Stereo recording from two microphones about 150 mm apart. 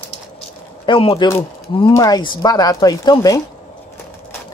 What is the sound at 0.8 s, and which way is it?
Speech, 35° left (ahead or behind).